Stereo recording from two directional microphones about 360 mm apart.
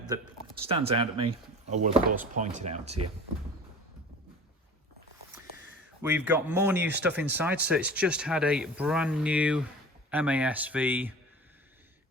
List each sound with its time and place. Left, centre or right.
0.7 s speech: centre
6.0 s speech: centre